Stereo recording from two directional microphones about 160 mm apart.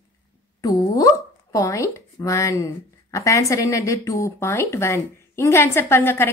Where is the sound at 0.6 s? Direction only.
25° left (ahead or behind).